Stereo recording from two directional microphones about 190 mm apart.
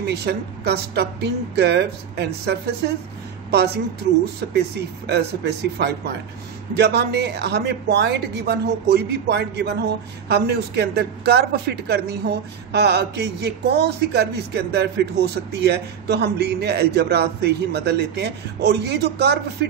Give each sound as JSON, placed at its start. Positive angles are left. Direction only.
{"t": 0.0, "sound": "a woman's voice", "side_deg": -60}
{"t": 3.5, "sound": "a woman's voice", "side_deg": -60}